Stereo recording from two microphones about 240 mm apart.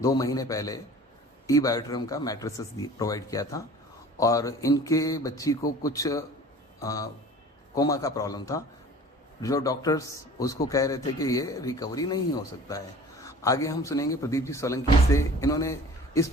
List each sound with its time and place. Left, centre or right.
0.0 s a man's voice: centre